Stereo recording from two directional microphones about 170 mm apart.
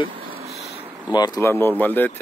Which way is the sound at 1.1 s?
25° left (ahead or behind).